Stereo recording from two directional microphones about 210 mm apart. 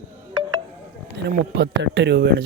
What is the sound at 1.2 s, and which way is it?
Speech, 55° right (ahead or behind).